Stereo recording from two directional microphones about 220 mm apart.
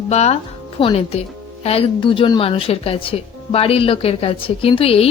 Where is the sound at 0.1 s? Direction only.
30° left (ahead or behind).